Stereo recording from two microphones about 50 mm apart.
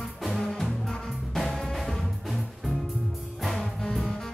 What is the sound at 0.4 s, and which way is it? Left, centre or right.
Music, centre.